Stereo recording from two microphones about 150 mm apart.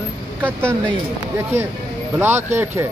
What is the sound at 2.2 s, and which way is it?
Speech, 15° right (ahead or behind).